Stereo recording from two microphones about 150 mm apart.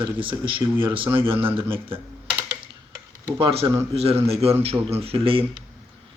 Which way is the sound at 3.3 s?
35° right (ahead or behind).